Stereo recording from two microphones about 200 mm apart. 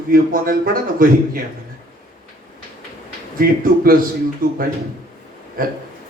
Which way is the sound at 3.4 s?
45° right (ahead or behind).